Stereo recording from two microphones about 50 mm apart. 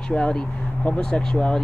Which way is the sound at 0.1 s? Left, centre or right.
Centre.